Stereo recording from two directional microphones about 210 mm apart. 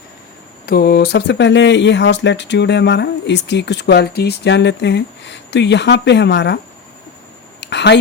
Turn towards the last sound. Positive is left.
turn(degrees=55)  # may be behind; listen again after turning